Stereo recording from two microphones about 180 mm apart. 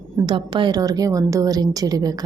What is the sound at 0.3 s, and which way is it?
Speech, 25° right (ahead or behind).